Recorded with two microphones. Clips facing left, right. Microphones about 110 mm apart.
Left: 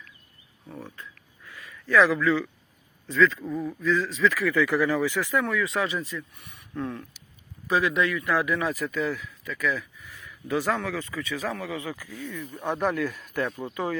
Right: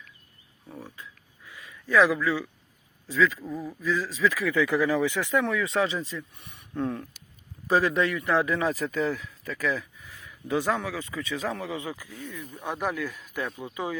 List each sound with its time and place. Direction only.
0.7 s a sound: 10° right (ahead or behind)
3.1 s speech: 10° right (ahead or behind); by 10.1 s 30° right (ahead or behind)
10.2 s speech: 20° right (ahead or behind)
12.6 s speech: centre (ahead or behind)